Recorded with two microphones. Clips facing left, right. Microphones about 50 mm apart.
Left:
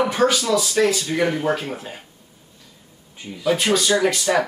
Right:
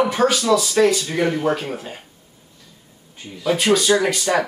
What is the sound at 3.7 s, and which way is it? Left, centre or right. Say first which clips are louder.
Speech: right 4 dB; centre.